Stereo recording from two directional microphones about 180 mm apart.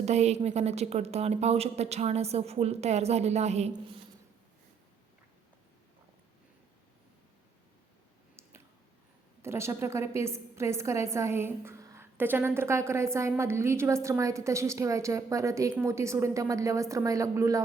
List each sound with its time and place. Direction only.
0.0 s a woman's voice: 40° right (ahead or behind)
9.4 s a woman's voice: 15° right (ahead or behind)